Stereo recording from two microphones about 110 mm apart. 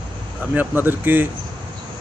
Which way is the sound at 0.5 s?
15° right (ahead or behind).